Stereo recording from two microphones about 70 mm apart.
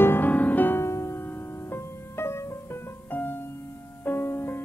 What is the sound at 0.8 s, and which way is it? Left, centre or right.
Music, left.